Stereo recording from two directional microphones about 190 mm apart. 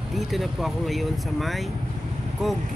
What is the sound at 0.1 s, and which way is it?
Speech, centre (ahead or behind).